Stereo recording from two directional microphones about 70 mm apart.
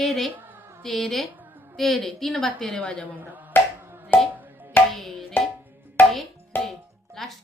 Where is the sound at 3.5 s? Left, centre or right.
Left.